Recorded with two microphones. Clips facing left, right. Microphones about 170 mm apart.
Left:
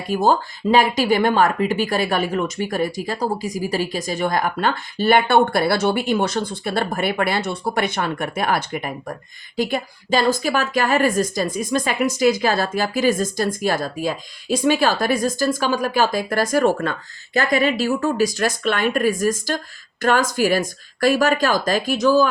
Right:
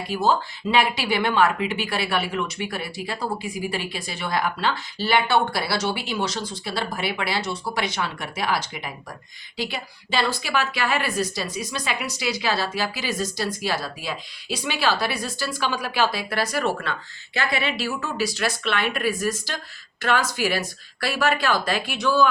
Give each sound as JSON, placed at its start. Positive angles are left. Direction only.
{"t": 0.1, "sound": "speech", "side_deg": 50}